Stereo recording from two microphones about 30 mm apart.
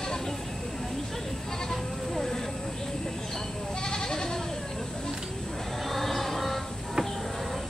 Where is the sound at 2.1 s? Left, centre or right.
Centre.